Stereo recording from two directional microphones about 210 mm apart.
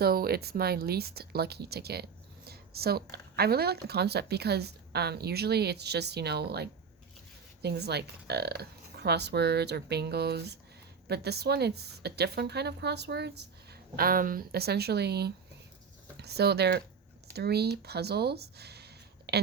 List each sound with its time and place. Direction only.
0.0 s speech: 45° right (ahead or behind)